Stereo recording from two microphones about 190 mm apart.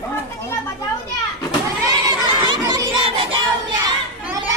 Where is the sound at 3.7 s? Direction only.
20° right (ahead or behind).